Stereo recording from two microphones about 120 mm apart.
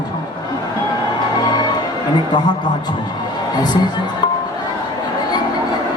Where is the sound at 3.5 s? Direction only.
35° left (ahead or behind).